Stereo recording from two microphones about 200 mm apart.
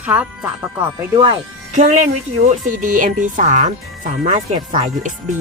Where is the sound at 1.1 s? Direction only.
25° right (ahead or behind).